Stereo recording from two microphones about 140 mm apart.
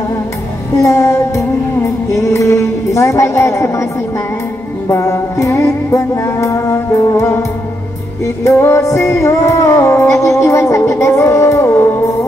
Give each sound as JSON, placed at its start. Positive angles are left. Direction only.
{"t": 0.8, "sound": "music", "side_deg": 20}
{"t": 2.1, "sound": "speech", "side_deg": 20}
{"t": 4.8, "sound": "music", "side_deg": 20}
{"t": 8.5, "sound": "music", "side_deg": 20}